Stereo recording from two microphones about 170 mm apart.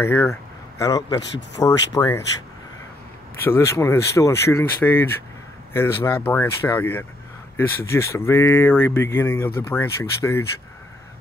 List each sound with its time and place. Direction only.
0.0 s speech: 15° left (ahead or behind)
3.4 s speech: 15° left (ahead or behind)